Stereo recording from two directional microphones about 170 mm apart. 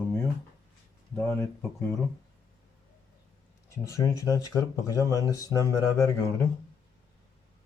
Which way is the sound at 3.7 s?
20° left (ahead or behind).